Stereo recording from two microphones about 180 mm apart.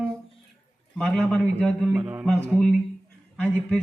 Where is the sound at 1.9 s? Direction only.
10° right (ahead or behind).